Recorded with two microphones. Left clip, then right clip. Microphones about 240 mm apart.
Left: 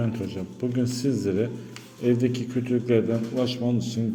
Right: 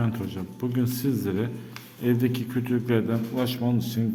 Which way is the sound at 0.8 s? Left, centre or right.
Centre.